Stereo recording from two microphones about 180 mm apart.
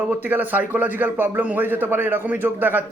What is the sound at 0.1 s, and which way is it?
A man's voice, 10° right (ahead or behind).